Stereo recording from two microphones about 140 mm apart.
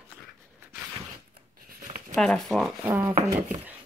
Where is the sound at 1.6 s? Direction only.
85° right.